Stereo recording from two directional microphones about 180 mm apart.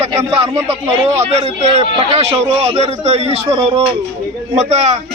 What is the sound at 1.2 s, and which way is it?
A man's voice, 35° right (ahead or behind).